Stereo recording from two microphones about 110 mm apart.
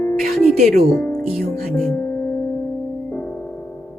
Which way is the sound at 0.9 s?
20° left (ahead or behind).